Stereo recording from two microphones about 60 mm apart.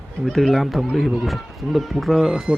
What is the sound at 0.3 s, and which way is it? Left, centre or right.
Speech, centre.